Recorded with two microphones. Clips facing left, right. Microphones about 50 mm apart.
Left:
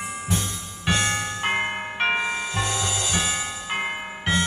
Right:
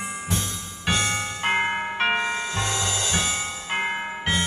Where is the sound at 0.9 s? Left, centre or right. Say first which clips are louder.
Left 1 dB; left.